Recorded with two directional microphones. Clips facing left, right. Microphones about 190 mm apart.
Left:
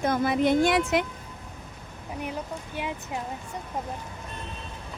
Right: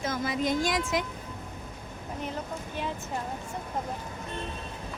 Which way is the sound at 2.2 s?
10° left (ahead or behind).